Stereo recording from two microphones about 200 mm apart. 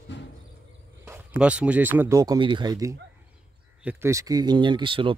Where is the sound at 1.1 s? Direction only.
5° right (ahead or behind).